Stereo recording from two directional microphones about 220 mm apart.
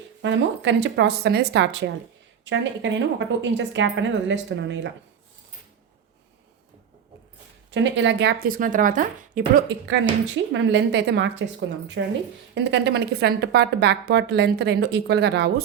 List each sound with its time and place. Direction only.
0.2 s a woman's voice: 55° right (ahead or behind)
7.7 s speech: 55° right (ahead or behind); by 9.6 s 35° right (ahead or behind)
10.5 s a woman's voice: 55° right (ahead or behind)